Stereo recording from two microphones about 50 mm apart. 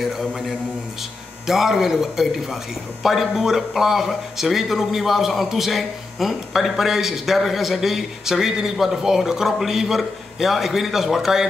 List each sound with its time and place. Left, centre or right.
1.5 s a man's voice: centre